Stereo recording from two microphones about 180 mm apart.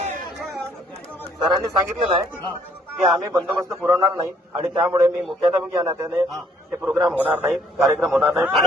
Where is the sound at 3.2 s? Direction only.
15° right (ahead or behind).